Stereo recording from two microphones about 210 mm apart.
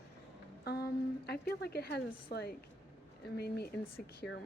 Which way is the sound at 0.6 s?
50° left (ahead or behind).